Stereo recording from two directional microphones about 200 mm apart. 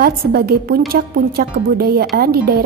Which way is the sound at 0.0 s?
50° right (ahead or behind).